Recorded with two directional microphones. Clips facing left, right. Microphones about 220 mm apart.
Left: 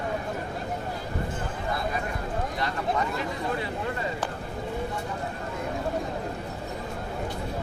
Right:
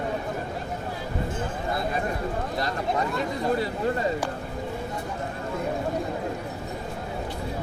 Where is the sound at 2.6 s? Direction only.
40° right (ahead or behind).